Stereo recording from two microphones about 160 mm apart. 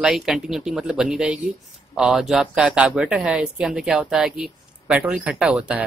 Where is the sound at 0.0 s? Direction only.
Centre (ahead or behind).